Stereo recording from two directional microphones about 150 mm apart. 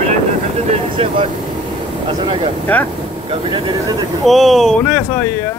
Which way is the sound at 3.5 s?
30° right (ahead or behind).